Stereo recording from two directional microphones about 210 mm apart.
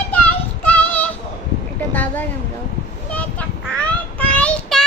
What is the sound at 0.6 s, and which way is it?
Child singing, 5° left (ahead or behind).